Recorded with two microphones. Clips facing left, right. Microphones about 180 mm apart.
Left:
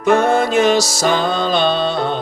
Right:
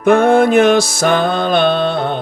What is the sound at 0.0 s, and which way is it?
Music, 55° right (ahead or behind).